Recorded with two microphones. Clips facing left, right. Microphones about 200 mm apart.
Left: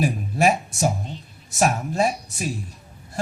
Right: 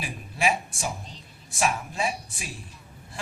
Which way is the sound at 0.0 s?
45° left (ahead or behind).